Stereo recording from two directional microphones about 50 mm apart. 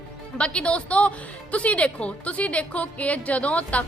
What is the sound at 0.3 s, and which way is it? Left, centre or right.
A woman's voice, left.